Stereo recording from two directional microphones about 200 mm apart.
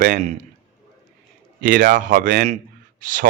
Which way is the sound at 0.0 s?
40° right (ahead or behind).